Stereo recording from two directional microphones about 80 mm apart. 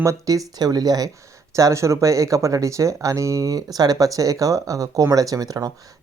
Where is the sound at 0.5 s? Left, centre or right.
Right.